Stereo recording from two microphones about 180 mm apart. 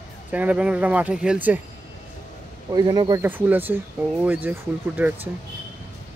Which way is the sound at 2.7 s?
20° right (ahead or behind).